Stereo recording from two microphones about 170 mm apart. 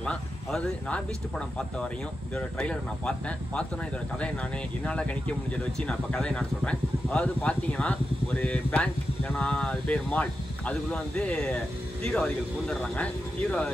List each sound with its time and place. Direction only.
0.0 s speech: 5° left (ahead or behind)
2.3 s speech: 5° left (ahead or behind)